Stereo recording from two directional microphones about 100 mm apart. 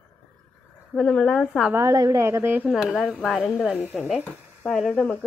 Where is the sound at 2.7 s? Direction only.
Centre (ahead or behind).